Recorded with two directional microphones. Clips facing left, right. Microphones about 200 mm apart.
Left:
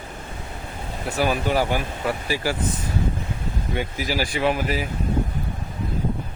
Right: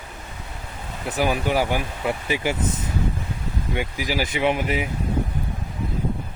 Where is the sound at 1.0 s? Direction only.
15° right (ahead or behind).